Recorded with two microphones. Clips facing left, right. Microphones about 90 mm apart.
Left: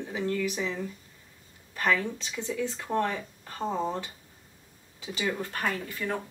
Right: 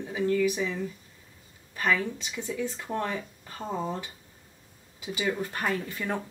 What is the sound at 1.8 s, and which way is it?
Speech, 15° right (ahead or behind).